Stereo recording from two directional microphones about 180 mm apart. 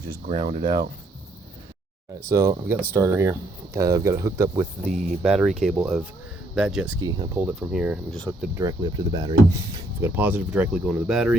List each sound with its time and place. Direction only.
0.3 s speech: 30° right (ahead or behind)
2.3 s speech: 15° right (ahead or behind)
5.2 s speech: 5° right (ahead or behind)
7.0 s speech: 25° right (ahead or behind)
7.3 s speech: 10° right (ahead or behind)
8.1 s speech: 5° left (ahead or behind)
8.5 s speech: 20° right (ahead or behind)
10.0 s speech: 10° right (ahead or behind)